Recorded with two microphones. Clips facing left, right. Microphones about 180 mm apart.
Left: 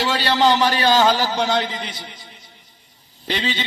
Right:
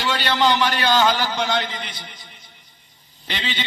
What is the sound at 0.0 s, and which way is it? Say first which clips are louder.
A man's voice: left 2 dB; 40° left (ahead or behind).